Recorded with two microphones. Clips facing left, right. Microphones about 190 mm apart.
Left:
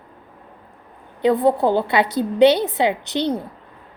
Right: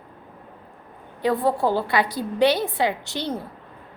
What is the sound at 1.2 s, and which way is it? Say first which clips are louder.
A woman's voice: left 5 dB; 20° left (ahead or behind).